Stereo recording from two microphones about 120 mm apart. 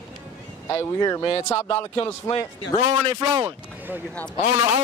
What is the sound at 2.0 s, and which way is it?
Speech, 50° left (ahead or behind).